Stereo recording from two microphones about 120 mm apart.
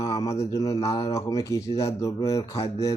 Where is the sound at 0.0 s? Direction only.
30° left (ahead or behind).